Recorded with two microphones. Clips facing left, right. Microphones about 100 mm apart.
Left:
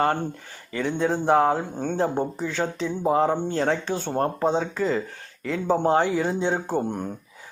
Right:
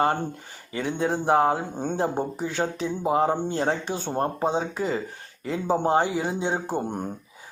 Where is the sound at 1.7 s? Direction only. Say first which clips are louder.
Left 1 dB; 20° right (ahead or behind).